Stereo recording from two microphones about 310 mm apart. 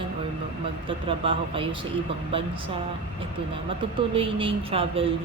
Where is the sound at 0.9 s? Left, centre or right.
Centre.